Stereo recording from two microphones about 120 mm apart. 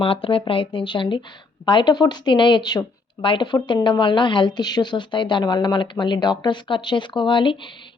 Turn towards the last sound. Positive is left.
turn(degrees=45)  # may be behind; listen again after turning